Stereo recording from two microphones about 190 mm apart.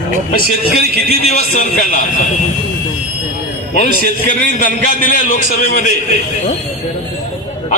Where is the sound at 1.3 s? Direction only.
45° left (ahead or behind).